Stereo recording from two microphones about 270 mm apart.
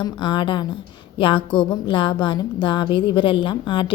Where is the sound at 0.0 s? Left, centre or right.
Centre.